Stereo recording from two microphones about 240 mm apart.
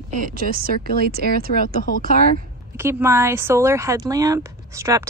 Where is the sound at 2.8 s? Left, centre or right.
Centre.